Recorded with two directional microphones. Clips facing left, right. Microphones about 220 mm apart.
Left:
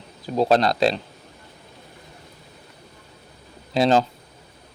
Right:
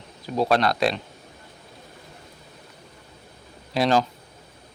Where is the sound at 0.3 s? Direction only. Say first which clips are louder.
Left 3 dB; 25° left (ahead or behind).